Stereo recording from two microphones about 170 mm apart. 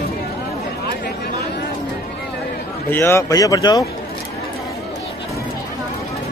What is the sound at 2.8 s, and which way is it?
A man's voice, 15° left (ahead or behind).